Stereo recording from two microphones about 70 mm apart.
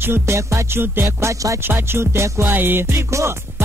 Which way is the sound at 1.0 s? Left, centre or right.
Right.